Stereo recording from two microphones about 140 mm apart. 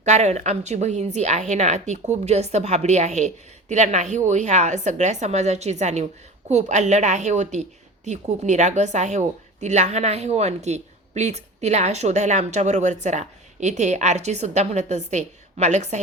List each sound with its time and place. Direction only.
0.0 s a woman's voice: 55° right (ahead or behind)